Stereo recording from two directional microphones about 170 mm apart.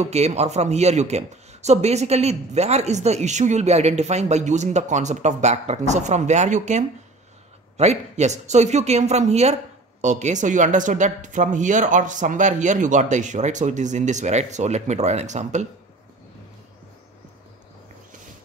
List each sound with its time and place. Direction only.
0.0 s speech: 40° right (ahead or behind)